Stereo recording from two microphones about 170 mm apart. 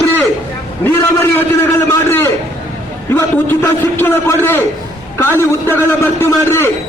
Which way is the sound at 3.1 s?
15° left (ahead or behind).